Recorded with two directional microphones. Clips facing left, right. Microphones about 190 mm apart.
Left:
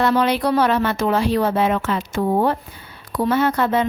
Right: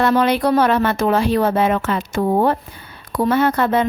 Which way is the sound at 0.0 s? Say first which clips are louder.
Right 2 dB; 50° right (ahead or behind).